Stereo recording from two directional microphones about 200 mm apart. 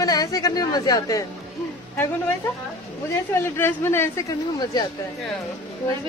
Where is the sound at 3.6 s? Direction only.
10° left (ahead or behind).